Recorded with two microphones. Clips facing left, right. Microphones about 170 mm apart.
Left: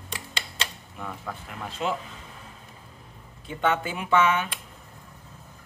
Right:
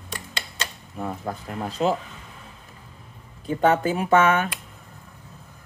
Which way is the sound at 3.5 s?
40° right (ahead or behind).